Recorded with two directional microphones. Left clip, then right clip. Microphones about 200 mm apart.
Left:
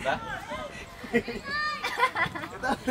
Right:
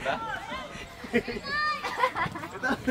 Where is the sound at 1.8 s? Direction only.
35° left (ahead or behind).